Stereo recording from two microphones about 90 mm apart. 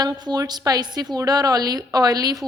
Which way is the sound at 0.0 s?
45° right (ahead or behind).